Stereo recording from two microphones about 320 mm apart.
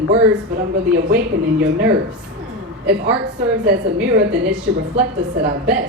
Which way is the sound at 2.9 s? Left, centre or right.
Right.